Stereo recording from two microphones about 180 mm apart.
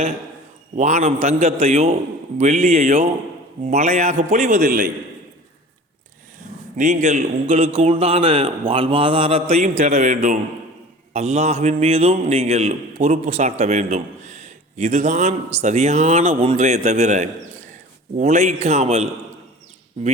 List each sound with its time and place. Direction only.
0.8 s a man's voice: 40° right (ahead or behind)
6.7 s a man's voice: 40° right (ahead or behind)